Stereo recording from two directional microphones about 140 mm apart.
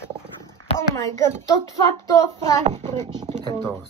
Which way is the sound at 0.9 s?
20° left (ahead or behind).